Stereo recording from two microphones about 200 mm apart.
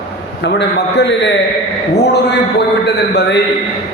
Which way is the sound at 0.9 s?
60° left (ahead or behind).